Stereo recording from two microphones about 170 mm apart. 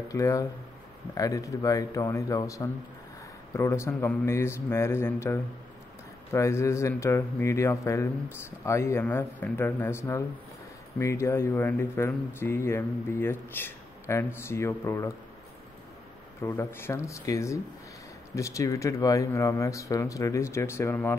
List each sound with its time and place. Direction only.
0.1 s speech: 20° left (ahead or behind)
16.4 s speech: 15° left (ahead or behind)